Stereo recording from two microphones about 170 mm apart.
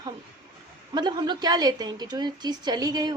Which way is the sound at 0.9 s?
25° right (ahead or behind).